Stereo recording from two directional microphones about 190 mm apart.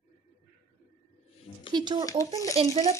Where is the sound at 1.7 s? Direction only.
25° right (ahead or behind).